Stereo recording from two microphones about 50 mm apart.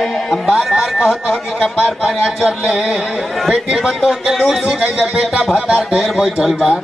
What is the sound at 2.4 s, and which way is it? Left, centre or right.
Speech, centre.